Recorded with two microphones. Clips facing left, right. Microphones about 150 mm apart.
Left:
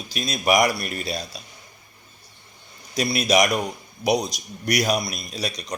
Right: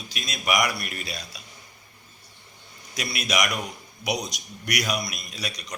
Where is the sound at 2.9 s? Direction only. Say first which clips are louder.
Left 8 dB; 30° left (ahead or behind).